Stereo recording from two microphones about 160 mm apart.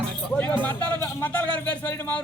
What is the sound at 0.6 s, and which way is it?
Speech, 10° left (ahead or behind).